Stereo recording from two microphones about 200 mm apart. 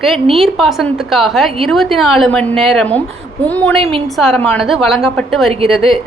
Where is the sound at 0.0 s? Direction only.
Centre (ahead or behind).